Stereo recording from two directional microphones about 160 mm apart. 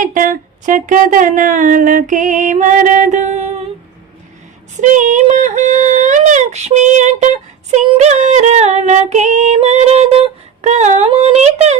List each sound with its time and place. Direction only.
0.0 s speech: 55° right (ahead or behind)
4.8 s female singing: 50° right (ahead or behind)